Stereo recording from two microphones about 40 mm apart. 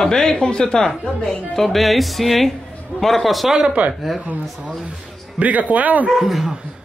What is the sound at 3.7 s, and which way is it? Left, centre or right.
Speech, right.